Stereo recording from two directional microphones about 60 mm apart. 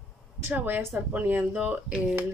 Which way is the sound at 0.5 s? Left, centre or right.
Right.